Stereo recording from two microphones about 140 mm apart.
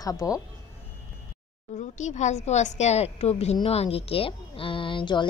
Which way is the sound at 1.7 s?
55° left (ahead or behind).